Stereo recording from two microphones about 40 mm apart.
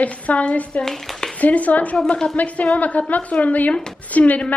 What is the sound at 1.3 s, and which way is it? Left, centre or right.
A woman's voice, left.